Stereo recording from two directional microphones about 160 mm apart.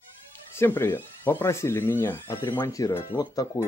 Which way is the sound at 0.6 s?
15° left (ahead or behind).